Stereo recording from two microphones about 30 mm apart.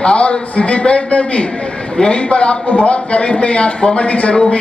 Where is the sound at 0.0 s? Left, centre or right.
Left.